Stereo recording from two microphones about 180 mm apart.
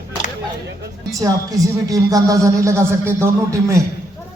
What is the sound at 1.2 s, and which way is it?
Speech, 20° right (ahead or behind).